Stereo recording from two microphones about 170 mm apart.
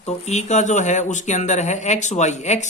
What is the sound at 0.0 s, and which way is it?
Speech, 40° left (ahead or behind).